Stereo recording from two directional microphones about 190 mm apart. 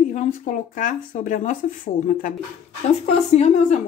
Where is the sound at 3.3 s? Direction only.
35° left (ahead or behind).